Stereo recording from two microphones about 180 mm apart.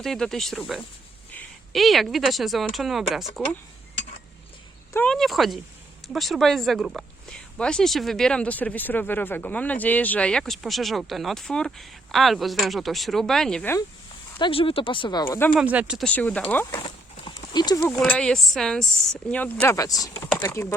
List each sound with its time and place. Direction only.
0.0 s speech: centre (ahead or behind)
4.9 s speech: 5° left (ahead or behind)
14.3 s speech: 30° left (ahead or behind)
15.5 s speech: 10° right (ahead or behind)
16.0 s speech: 10° left (ahead or behind)
16.8 s clip-clop: 25° left (ahead or behind)
17.7 s speech: 10° left (ahead or behind)